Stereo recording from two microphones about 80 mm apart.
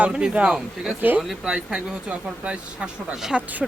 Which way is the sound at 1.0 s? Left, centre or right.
Right.